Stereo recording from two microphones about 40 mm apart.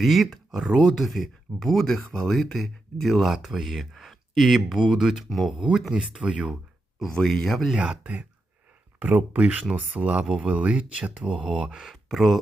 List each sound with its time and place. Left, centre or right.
0.0 s speech: centre
0.6 s speech: centre
0.9 s speech: centre
5.9 s speech: right
7.1 s speech: centre
8.0 s speech: right
10.3 s speech: right
12.0 s speech: centre